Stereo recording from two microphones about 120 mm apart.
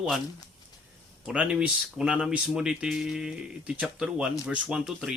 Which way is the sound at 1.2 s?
10° right (ahead or behind).